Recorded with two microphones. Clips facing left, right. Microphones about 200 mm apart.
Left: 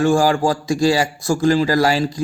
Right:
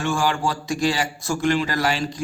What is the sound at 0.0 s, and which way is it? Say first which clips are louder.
A man's voice: left 8 dB; 35° left (ahead or behind).